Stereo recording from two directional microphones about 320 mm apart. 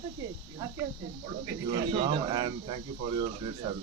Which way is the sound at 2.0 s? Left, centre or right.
Centre.